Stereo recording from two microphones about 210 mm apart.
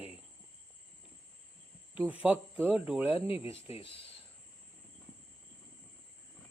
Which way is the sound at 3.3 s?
25° left (ahead or behind).